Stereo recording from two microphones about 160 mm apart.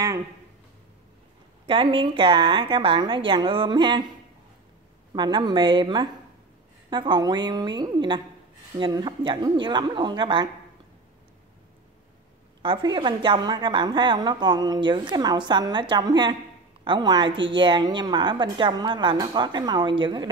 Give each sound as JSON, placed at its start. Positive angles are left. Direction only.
{"t": 1.7, "sound": "a woman's voice", "side_deg": -30}
{"t": 5.1, "sound": "a woman's voice", "side_deg": -25}
{"t": 12.6, "sound": "a woman's voice", "side_deg": -30}